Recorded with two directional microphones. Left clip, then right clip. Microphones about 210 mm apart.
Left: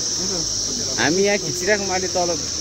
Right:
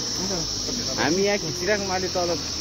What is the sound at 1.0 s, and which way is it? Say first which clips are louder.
Cricket: left 4 dB; 50° left (ahead or behind).